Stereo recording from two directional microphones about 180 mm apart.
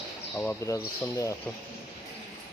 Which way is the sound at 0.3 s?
15° left (ahead or behind).